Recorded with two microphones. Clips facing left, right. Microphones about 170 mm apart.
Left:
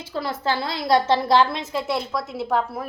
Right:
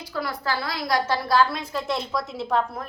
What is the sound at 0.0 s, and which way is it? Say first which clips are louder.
A woman's voice: left 3 dB; 25° left (ahead or behind).